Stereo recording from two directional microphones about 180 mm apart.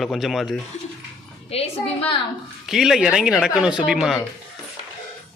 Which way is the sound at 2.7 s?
Centre (ahead or behind).